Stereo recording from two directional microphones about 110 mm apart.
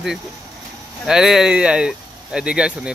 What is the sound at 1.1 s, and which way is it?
A man's voice, 5° right (ahead or behind).